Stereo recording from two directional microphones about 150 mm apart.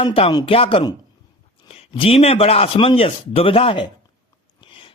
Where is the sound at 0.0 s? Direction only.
40° left (ahead or behind).